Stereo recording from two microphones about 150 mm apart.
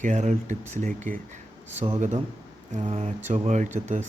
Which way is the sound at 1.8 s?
40° right (ahead or behind).